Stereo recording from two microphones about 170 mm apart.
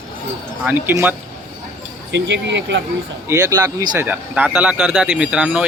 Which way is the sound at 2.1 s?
90° right.